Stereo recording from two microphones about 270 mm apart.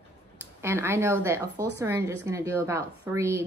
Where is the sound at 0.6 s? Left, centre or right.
Centre.